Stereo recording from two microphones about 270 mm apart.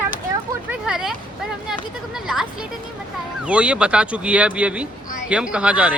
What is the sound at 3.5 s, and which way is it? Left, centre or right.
Speech, centre.